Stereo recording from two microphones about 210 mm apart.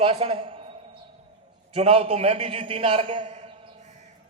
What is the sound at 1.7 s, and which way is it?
A man's voice, 25° right (ahead or behind).